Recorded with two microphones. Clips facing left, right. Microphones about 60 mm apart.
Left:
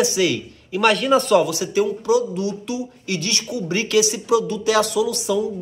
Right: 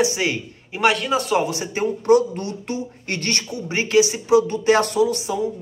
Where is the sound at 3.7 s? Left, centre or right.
Right.